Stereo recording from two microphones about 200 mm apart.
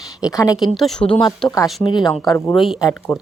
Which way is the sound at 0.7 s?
Centre (ahead or behind).